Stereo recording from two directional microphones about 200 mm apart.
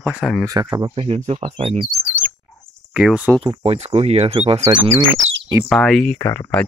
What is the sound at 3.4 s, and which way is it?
Speech, 30° right (ahead or behind).